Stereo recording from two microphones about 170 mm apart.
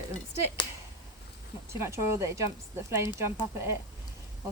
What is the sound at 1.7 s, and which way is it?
Speech, 15° right (ahead or behind).